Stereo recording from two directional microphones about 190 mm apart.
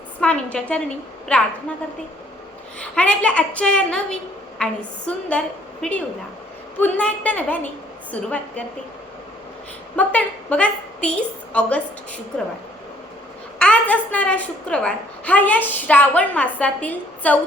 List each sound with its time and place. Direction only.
0.2 s a woman's voice: 5° left (ahead or behind)
2.7 s a woman's voice: 5° left (ahead or behind)
9.9 s a woman's voice: 10° left (ahead or behind)
13.6 s a woman's voice: 5° left (ahead or behind)